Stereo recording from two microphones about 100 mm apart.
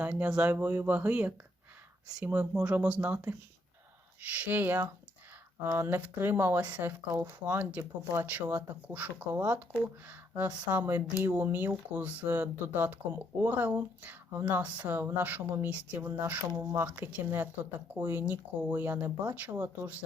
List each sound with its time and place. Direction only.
0.0 s speech: 10° right (ahead or behind)
4.4 s speech: 20° right (ahead or behind)